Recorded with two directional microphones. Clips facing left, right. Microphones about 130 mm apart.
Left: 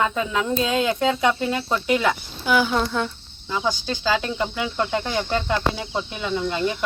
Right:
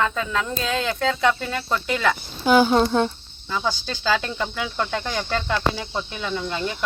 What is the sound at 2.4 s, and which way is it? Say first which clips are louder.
Speech: right 4 dB; 35° right (ahead or behind).